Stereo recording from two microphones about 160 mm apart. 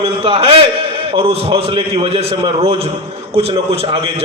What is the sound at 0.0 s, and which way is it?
A man's voice, 40° right (ahead or behind).